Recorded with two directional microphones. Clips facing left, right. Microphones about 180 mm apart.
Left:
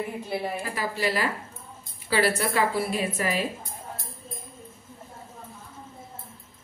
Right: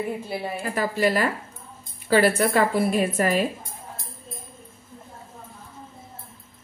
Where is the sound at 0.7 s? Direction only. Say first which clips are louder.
Right 7 dB; 50° right (ahead or behind).